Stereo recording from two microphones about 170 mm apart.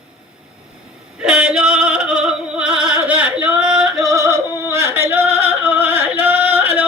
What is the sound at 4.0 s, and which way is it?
Yodeling, 20° right (ahead or behind).